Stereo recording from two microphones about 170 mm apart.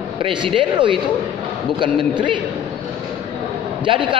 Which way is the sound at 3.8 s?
30° right (ahead or behind).